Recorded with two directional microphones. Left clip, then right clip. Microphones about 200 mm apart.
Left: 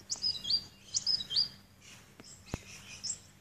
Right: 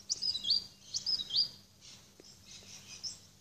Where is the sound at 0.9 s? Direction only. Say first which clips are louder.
Left 2 dB; 50° right (ahead or behind).